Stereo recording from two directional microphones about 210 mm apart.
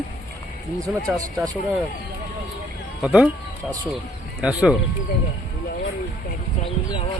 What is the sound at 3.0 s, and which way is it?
Speech, 5° right (ahead or behind).